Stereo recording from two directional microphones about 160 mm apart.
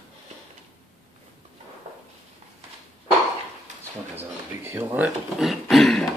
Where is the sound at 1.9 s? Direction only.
45° right (ahead or behind).